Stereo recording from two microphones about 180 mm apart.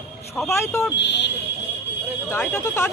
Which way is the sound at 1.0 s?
75° left (ahead or behind).